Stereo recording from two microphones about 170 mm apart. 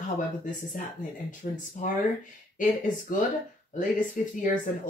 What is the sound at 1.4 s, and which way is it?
Speech, 55° left (ahead or behind).